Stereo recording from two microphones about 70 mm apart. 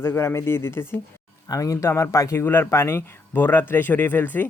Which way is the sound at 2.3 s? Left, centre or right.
Left.